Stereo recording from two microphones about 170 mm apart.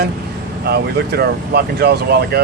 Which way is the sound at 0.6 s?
70° right (ahead or behind).